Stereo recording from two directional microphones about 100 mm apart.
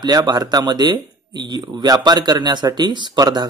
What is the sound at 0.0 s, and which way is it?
Speech, 40° right (ahead or behind).